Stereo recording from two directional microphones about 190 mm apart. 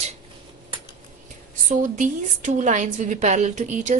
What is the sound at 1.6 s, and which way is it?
A woman's voice, 40° right (ahead or behind).